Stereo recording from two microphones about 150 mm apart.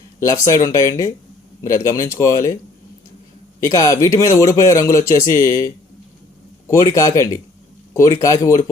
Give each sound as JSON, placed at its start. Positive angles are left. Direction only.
{"t": 0.2, "sound": "a man's voice", "side_deg": 20}
{"t": 3.6, "sound": "a man's voice", "side_deg": 20}